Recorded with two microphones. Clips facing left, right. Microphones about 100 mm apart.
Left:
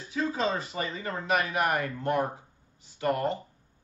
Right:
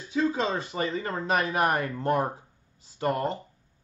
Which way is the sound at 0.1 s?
30° right (ahead or behind).